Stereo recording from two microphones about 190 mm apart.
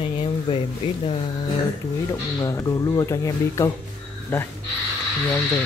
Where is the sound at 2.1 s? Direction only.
15° left (ahead or behind).